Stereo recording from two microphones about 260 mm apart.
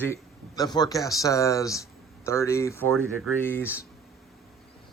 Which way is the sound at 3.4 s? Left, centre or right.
Centre.